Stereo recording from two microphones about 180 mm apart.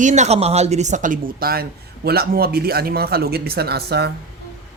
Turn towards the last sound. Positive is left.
turn(degrees=-65)  # may be behind; listen again after turning